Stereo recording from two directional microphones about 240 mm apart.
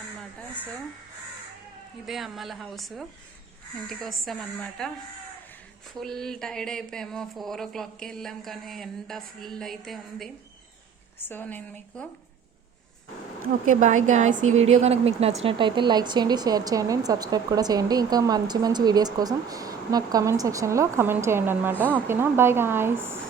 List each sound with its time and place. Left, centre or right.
2.0 s speech: centre
6.0 s speech: centre
13.7 s a woman's voice: right; by 23.2 s centre